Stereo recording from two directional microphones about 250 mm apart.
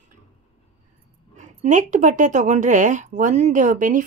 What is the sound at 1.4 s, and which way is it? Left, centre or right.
Speech, right.